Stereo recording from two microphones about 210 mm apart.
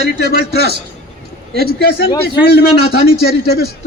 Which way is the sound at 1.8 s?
50° left (ahead or behind).